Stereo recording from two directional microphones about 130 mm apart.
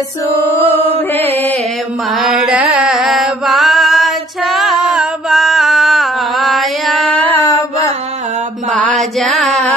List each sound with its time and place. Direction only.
0.9 s mantra: 50° right (ahead or behind)
2.1 s chant: 5° right (ahead or behind)
7.2 s mantra: 15° left (ahead or behind)
8.7 s music: centre (ahead or behind)